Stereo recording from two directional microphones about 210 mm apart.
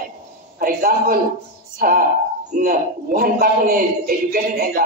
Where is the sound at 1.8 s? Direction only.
40° right (ahead or behind).